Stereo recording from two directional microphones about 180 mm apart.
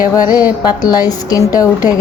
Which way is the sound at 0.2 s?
20° left (ahead or behind).